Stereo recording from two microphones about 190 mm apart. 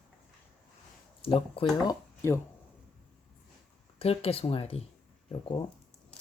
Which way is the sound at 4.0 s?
30° left (ahead or behind).